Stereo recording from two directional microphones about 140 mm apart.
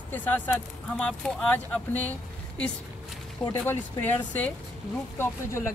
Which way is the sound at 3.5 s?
15° left (ahead or behind).